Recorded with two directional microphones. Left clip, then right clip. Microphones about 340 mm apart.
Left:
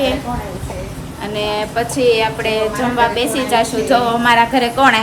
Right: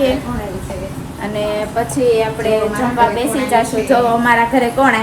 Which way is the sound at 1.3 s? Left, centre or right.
Centre.